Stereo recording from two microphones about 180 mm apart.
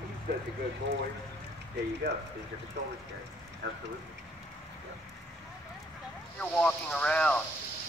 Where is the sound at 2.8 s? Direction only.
75° right (ahead or behind).